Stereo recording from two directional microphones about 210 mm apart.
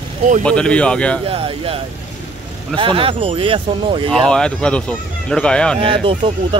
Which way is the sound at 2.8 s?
25° right (ahead or behind).